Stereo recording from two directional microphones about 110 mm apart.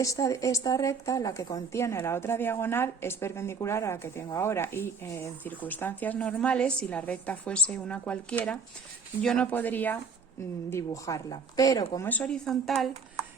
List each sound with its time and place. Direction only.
0.0 s a woman's voice: 30° left (ahead or behind)
10.7 s a woman's voice: 30° left (ahead or behind)
12.0 s speech: 15° left (ahead or behind)